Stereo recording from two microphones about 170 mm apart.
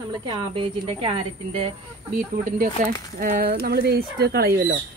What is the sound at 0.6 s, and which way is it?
Speech, 30° right (ahead or behind).